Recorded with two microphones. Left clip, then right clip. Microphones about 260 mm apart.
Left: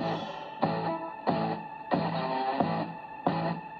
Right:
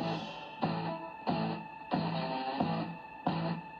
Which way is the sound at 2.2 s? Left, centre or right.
Centre.